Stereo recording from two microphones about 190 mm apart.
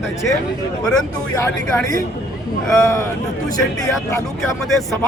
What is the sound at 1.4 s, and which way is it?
Speech, 15° left (ahead or behind).